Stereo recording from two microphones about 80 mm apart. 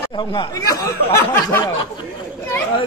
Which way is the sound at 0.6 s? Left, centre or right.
Left.